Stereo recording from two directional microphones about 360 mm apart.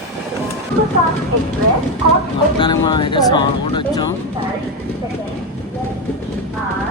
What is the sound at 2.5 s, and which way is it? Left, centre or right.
Speech, centre.